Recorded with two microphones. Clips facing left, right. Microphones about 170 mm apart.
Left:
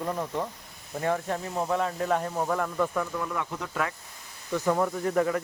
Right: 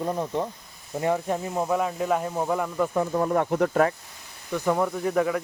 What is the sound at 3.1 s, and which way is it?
Speech, 40° right (ahead or behind).